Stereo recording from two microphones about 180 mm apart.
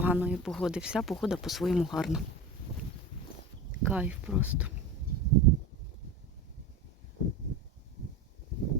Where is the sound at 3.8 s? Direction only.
10° right (ahead or behind).